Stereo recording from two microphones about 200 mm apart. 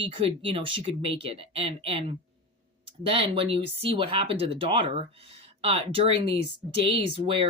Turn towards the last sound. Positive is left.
turn(degrees=-25)  # may be behind; listen again after turning